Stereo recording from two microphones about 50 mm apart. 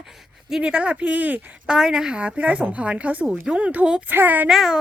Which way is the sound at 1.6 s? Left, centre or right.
Centre.